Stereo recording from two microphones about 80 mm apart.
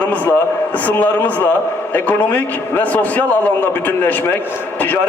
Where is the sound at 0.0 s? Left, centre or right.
Centre.